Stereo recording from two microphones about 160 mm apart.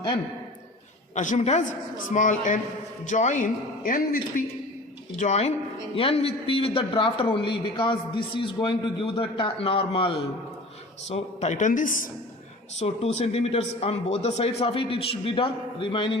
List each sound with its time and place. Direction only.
1.1 s a man's voice: 50° left (ahead or behind)
5.2 s a man's voice: 45° left (ahead or behind)
11.1 s a man's voice: 45° left (ahead or behind)
12.8 s a man's voice: 40° left (ahead or behind)